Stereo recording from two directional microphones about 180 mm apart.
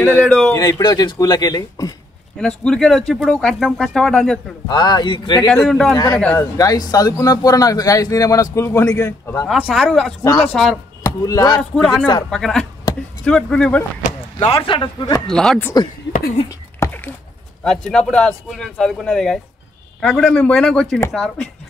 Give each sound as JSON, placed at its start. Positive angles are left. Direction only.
{"t": 0.0, "sound": "a man's voice", "side_deg": 10}
{"t": 2.3, "sound": "speech", "side_deg": 5}
{"t": 4.6, "sound": "speech", "side_deg": 25}
{"t": 5.5, "sound": "speech", "side_deg": 0}
{"t": 6.3, "sound": "a man's voice", "side_deg": 20}
{"t": 9.5, "sound": "speech", "side_deg": 0}
{"t": 11.1, "sound": "speech", "side_deg": 20}
{"t": 11.7, "sound": "speech", "side_deg": 5}
{"t": 14.4, "sound": "speech", "side_deg": 30}
{"t": 15.2, "sound": "speech", "side_deg": 0}
{"t": 16.4, "sound": "a sound", "side_deg": 15}
{"t": 17.6, "sound": "speech", "side_deg": 5}